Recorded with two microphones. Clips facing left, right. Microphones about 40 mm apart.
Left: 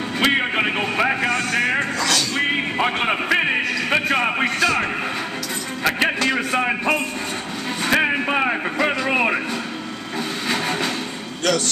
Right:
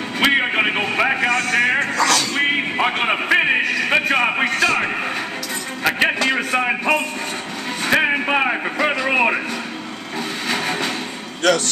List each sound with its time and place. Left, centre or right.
0.2 s music: centre
1.5 s speech: centre
2.3 s music: centre
5.9 s a sound: centre
7.8 s speech: centre
10.5 s train: centre